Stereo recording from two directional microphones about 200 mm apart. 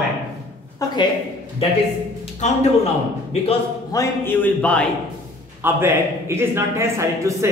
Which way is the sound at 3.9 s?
10° left (ahead or behind).